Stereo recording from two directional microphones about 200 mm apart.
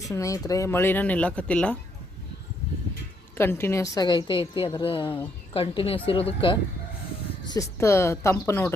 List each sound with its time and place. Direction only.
0.1 s speech: 15° left (ahead or behind)
3.3 s a woman's voice: 10° left (ahead or behind)